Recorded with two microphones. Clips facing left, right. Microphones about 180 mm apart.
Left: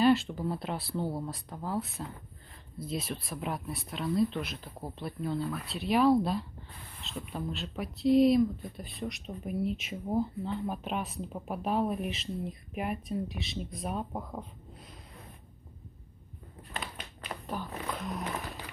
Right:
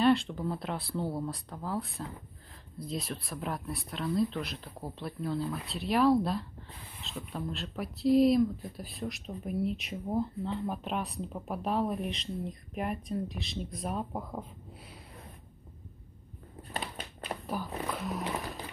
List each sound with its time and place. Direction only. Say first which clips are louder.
0.0 s speech: left 1 dB; 5° left (ahead or behind)
16.7 s a sound: right 2 dB; 35° right (ahead or behind)
17.5 s speech: right 1 dB; 5° right (ahead or behind)